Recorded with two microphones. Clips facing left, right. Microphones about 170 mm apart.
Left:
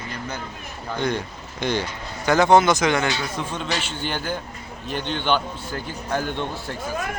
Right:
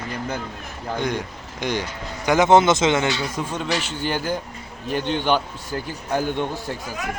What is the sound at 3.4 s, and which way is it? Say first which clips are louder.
A man's voice: right 2 dB; 5° right (ahead or behind).